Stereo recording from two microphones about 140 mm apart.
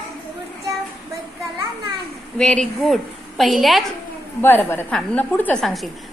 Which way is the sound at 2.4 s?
5° left (ahead or behind).